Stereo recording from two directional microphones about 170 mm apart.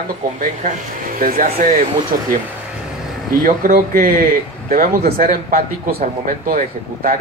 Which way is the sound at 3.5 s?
55° right (ahead or behind).